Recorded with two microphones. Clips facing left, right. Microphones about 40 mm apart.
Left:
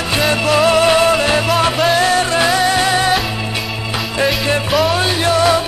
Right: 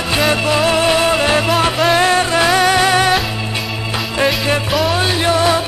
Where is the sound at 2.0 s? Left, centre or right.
Right.